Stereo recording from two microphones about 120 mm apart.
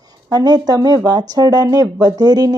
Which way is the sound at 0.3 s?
35° right (ahead or behind).